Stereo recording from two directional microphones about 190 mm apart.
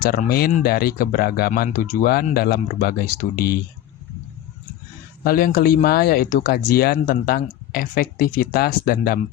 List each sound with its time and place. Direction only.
0.0 s speech: 50° left (ahead or behind)
5.2 s speech: 50° left (ahead or behind)